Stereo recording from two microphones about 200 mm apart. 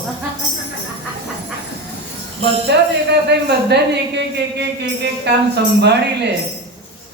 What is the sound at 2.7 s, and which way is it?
Speech, 60° right (ahead or behind).